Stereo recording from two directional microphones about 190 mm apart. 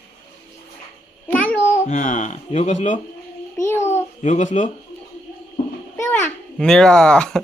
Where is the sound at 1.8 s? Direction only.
40° left (ahead or behind).